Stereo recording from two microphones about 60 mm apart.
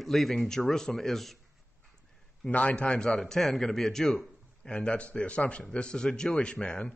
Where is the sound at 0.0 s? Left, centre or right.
Centre.